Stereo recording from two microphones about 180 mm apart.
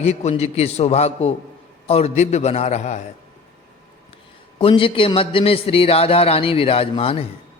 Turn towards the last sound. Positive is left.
turn(degrees=30)  # may be behind; listen again after turning